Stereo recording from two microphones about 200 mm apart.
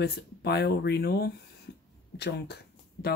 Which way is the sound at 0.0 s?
55° left (ahead or behind).